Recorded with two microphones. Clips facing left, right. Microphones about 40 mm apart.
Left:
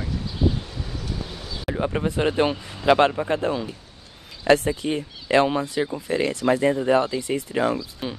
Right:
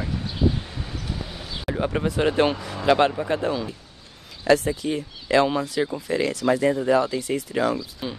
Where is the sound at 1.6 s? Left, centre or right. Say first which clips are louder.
Even; centre.